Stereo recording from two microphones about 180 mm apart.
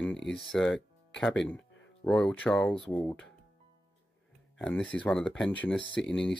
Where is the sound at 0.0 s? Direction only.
5° left (ahead or behind).